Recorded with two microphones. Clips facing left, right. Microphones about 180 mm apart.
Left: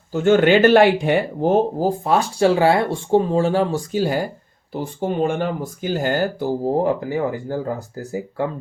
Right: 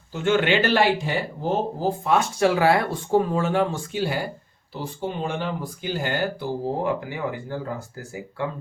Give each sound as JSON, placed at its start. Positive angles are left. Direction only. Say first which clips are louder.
{"t": 0.1, "sound": "speech", "louder": "left 7 dB", "side_deg": 40}
{"t": 1.8, "sound": "speech", "louder": "left 3 dB", "side_deg": 35}
{"t": 4.7, "sound": "speech", "louder": "left 6 dB", "side_deg": 50}